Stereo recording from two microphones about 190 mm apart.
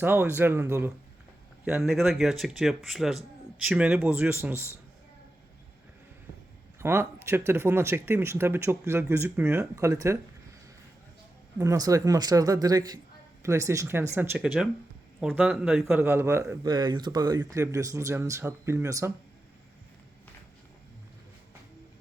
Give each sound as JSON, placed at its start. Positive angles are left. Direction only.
{"t": 0.0, "sound": "speech", "side_deg": -10}
{"t": 6.7, "sound": "speech", "side_deg": -15}
{"t": 11.5, "sound": "speech", "side_deg": -15}